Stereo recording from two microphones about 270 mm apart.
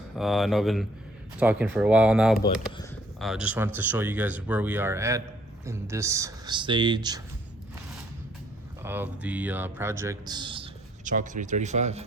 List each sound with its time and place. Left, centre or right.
0.2 s speech: centre
8.8 s speech: centre; by 12.0 s right